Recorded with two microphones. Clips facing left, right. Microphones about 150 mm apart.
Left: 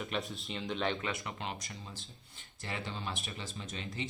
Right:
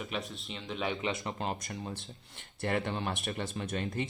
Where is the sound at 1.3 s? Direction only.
40° right (ahead or behind).